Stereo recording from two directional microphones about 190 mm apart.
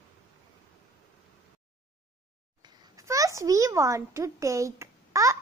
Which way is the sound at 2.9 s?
15° right (ahead or behind).